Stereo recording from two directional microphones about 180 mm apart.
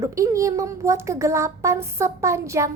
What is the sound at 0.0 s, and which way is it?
A woman's voice, 15° right (ahead or behind).